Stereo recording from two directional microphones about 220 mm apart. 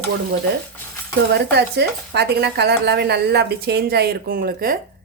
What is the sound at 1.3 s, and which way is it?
Speech, 50° right (ahead or behind).